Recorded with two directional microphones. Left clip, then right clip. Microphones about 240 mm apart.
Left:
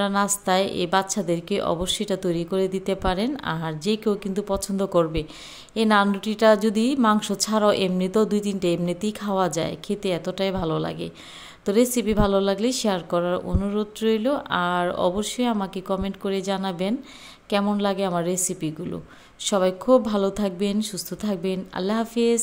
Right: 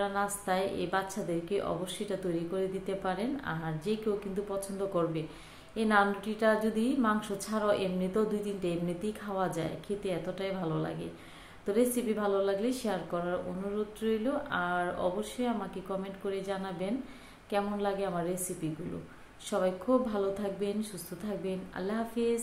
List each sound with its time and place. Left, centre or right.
0.0 s a woman's voice: left